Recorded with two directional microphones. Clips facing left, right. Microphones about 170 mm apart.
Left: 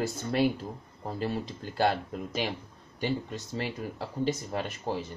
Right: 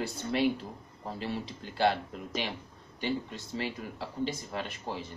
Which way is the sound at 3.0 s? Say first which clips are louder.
Left 2 dB; 45° left (ahead or behind).